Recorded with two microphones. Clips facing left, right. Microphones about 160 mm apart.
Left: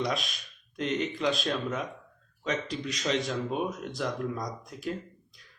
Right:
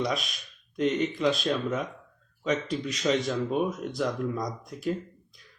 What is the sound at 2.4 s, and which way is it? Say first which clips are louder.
Speech: right 4 dB; centre (ahead or behind).